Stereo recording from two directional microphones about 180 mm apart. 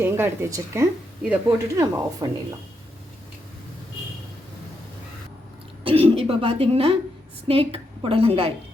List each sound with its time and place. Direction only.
0.0 s speech: 15° right (ahead or behind)
5.8 s speech: 30° right (ahead or behind)